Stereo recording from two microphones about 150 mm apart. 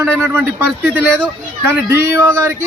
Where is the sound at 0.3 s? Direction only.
15° right (ahead or behind).